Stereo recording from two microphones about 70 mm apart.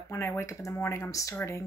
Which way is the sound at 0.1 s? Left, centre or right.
Left.